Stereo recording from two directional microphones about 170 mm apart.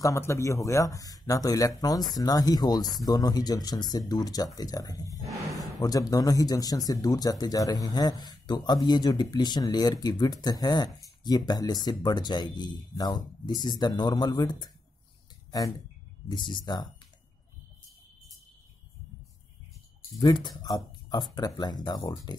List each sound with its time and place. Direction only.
0.0 s speech: 15° left (ahead or behind)
16.3 s speech: 25° left (ahead or behind)
20.2 s speech: 25° left (ahead or behind)